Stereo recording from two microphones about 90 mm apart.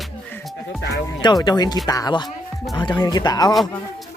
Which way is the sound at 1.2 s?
50° left (ahead or behind).